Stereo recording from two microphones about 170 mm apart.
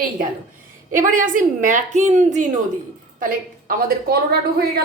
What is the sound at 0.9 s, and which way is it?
A woman's voice, 50° right (ahead or behind).